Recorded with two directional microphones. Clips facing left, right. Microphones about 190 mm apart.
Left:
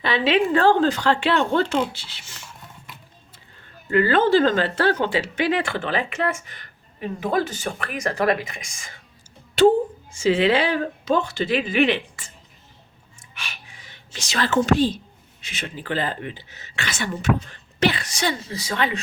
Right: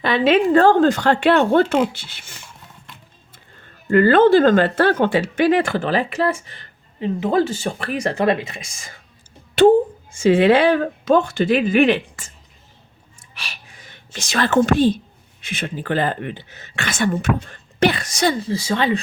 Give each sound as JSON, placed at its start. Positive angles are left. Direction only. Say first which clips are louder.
{"t": 0.0, "sound": "speech", "louder": "right 4 dB", "side_deg": -50}
{"t": 3.8, "sound": "speech", "louder": "right 6 dB", "side_deg": -50}
{"t": 9.6, "sound": "a child's voice", "louder": "right 4 dB", "side_deg": -55}
{"t": 13.3, "sound": "a sound", "louder": "right 1 dB", "side_deg": -35}
{"t": 15.4, "sound": "speech", "louder": "right 6 dB", "side_deg": -55}